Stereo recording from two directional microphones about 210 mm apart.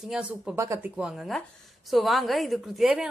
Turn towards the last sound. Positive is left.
turn(degrees=0)  # may be behind; listen again after turning